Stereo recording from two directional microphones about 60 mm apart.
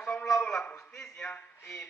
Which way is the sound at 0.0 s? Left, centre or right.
Centre.